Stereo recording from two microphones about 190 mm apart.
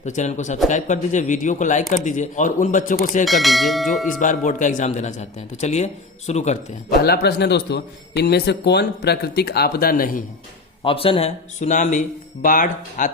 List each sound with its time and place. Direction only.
0.0 s speech: 40° left (ahead or behind)
3.2 s speech: centre (ahead or behind)
4.2 s speech: 40° left (ahead or behind)
7.0 s speech: 55° left (ahead or behind)
10.8 s speech: 30° left (ahead or behind); by 13.1 s 45° left (ahead or behind)